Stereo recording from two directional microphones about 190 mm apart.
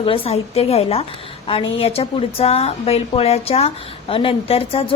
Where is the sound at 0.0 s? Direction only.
30° left (ahead or behind).